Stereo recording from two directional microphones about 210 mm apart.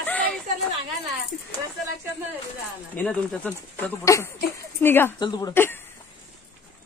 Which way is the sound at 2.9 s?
10° left (ahead or behind).